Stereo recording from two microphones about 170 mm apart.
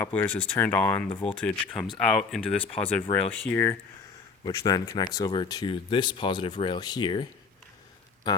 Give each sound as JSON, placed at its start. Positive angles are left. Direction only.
{"t": 0.0, "sound": "speech", "side_deg": 10}
{"t": 4.4, "sound": "speech", "side_deg": 20}